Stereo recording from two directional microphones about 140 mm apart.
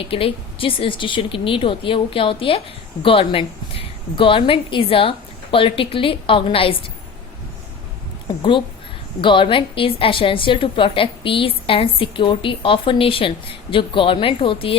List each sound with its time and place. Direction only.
0.0 s a woman's voice: 40° left (ahead or behind)
8.4 s a woman's voice: 35° left (ahead or behind)